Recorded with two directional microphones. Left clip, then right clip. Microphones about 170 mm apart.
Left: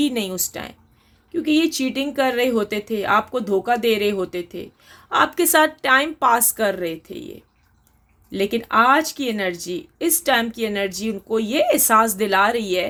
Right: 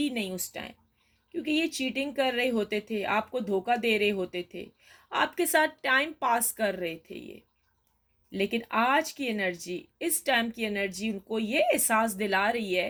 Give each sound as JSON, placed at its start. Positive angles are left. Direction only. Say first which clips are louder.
{"t": 0.0, "sound": "speech", "louder": "left 9 dB", "side_deg": 35}